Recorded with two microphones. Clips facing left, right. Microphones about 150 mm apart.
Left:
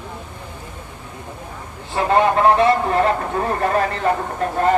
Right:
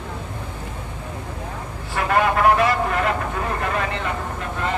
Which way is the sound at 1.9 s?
30° left (ahead or behind).